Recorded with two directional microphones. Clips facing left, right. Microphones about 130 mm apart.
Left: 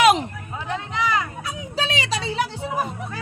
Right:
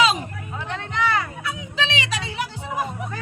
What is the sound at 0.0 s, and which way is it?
Chatter, 70° left (ahead or behind).